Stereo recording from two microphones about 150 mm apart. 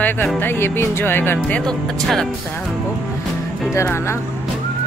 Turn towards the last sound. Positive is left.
turn(degrees=15)  # may be behind; listen again after turning